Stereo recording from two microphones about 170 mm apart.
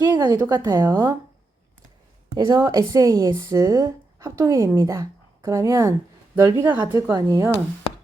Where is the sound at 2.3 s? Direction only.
25° right (ahead or behind).